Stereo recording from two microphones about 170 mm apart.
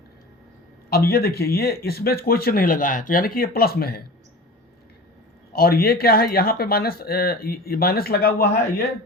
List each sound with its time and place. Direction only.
0.9 s speech: 65° left (ahead or behind)
5.5 s speech: 65° left (ahead or behind)